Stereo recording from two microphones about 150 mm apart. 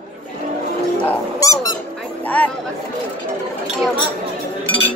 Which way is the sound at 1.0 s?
20° left (ahead or behind).